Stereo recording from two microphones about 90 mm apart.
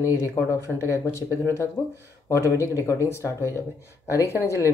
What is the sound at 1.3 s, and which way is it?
Speech, 30° right (ahead or behind).